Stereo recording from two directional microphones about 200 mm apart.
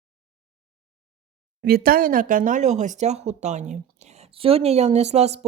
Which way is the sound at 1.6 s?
50° right (ahead or behind).